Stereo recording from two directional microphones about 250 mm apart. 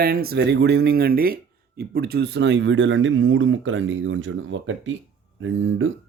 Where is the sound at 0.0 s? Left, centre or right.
Right.